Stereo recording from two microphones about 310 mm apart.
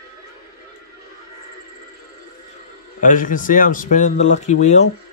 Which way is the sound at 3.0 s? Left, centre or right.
Left.